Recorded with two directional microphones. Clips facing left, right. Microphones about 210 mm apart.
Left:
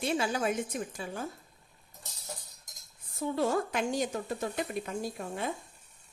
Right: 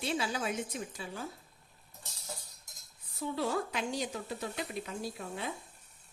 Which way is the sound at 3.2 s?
50° left (ahead or behind).